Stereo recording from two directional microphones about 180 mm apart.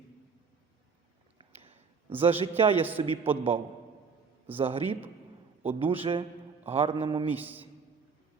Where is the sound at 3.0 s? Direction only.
30° right (ahead or behind).